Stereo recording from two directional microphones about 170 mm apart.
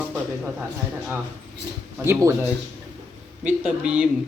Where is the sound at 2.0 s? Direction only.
15° right (ahead or behind).